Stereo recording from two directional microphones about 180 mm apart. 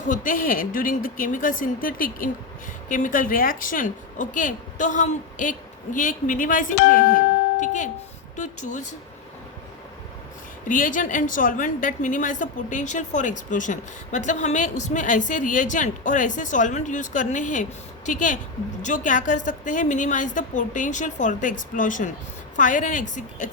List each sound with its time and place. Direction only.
0.0 s a woman's voice: 45° left (ahead or behind)
10.7 s a woman's voice: 50° left (ahead or behind)